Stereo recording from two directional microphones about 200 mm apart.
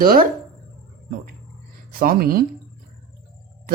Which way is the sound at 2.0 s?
45° right (ahead or behind).